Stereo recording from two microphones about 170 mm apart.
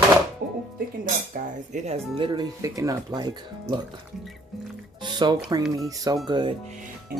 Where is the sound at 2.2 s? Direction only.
25° right (ahead or behind).